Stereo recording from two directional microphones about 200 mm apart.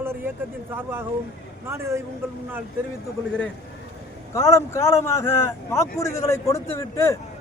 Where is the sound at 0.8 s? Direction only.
10° right (ahead or behind).